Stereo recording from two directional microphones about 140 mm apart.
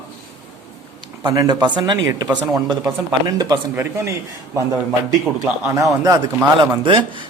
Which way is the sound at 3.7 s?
20° right (ahead or behind).